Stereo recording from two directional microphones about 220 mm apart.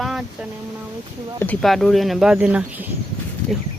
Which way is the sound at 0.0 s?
Centre (ahead or behind).